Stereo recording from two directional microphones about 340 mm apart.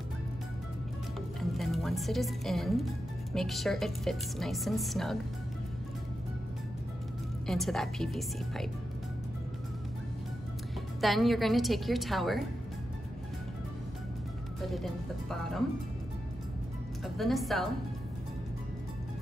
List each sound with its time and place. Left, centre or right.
1.4 s speech: centre
7.4 s speech: centre
11.0 s speech: centre
14.7 s speech: centre
17.0 s speech: centre